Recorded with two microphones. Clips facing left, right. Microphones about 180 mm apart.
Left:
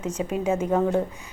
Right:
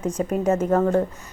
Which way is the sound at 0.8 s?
Centre (ahead or behind).